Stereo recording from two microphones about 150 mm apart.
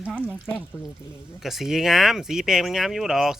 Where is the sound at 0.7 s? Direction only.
15° left (ahead or behind).